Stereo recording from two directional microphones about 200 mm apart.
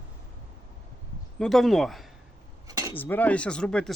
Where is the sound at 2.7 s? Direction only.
15° right (ahead or behind).